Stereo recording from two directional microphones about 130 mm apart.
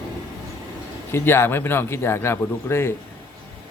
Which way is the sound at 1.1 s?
15° left (ahead or behind).